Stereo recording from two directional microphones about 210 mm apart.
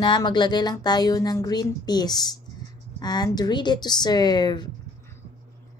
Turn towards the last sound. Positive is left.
turn(degrees=20)  # may be behind; listen again after turning